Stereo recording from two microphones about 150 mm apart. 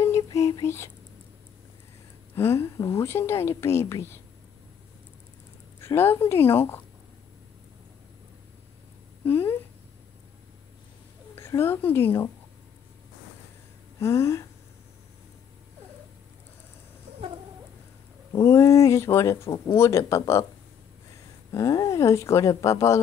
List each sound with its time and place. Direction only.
0.0 s whispering: 20° left (ahead or behind)
2.3 s a woman's voice: 15° left (ahead or behind)
5.8 s a woman's voice: 15° left (ahead or behind)
9.2 s a woman's voice: 15° left (ahead or behind)
11.3 s speech: 15° left (ahead or behind)
13.9 s speech: 20° left (ahead or behind)
18.3 s speech: 20° left (ahead or behind)
21.5 s speech: 20° left (ahead or behind)